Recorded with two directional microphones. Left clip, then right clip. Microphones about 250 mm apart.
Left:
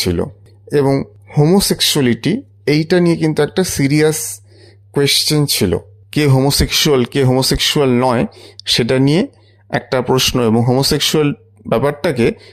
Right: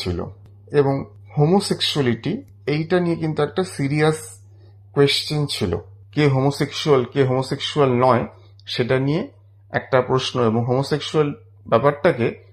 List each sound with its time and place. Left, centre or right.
0.0 s speech: left